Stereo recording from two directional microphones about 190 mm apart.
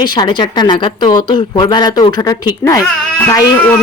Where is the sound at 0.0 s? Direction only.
25° left (ahead or behind).